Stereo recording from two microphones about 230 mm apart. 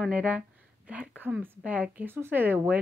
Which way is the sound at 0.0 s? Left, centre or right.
Centre.